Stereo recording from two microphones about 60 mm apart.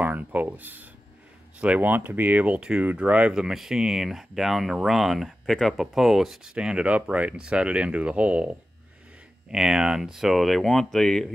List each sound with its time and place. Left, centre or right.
0.0 s speech: right
3.3 s speech: centre
6.5 s speech: centre
9.5 s speech: centre